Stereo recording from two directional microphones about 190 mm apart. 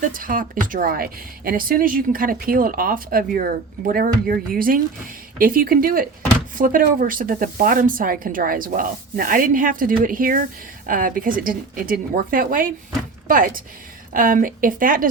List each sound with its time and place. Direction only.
0.1 s speech: 45° right (ahead or behind)